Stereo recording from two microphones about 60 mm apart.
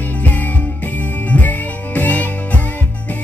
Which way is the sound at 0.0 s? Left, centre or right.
Left.